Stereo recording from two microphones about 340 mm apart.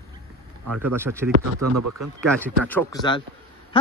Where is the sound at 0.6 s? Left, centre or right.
Right.